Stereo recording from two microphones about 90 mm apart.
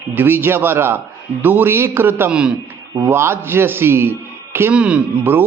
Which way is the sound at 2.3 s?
10° right (ahead or behind).